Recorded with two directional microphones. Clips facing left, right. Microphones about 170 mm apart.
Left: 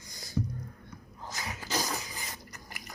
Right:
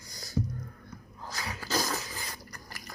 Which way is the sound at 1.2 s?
20° left (ahead or behind).